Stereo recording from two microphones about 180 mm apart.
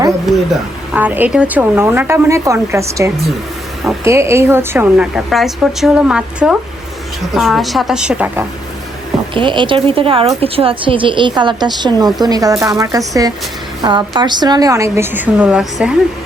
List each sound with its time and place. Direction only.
0.9 s a woman's voice: 10° right (ahead or behind)
9.3 s a woman's voice: 25° right (ahead or behind); by 15.9 s 5° right (ahead or behind)